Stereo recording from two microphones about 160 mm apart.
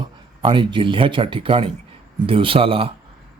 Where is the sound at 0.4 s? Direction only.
30° right (ahead or behind).